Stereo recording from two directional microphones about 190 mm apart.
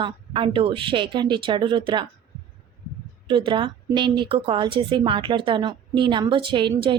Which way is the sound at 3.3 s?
25° right (ahead or behind).